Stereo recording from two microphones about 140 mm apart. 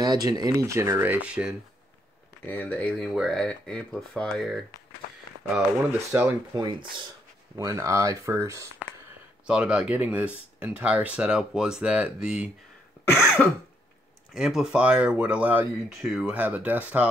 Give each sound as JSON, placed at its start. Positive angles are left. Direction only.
{"t": 0.0, "sound": "speech", "side_deg": -30}
{"t": 2.4, "sound": "speech", "side_deg": 15}
{"t": 5.6, "sound": "speech", "side_deg": -15}
{"t": 6.5, "sound": "speech", "side_deg": -30}
{"t": 9.5, "sound": "speech", "side_deg": -5}
{"t": 13.4, "sound": "speech", "side_deg": 10}
{"t": 14.3, "sound": "speech", "side_deg": -5}